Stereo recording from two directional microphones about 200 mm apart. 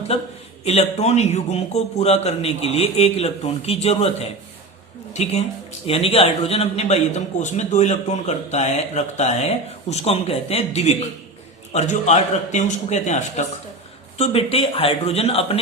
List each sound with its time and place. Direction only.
0.6 s a man's voice: 30° left (ahead or behind)